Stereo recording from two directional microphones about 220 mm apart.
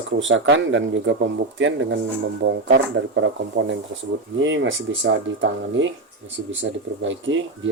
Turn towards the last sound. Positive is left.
turn(degrees=-55)  # may be behind; listen again after turning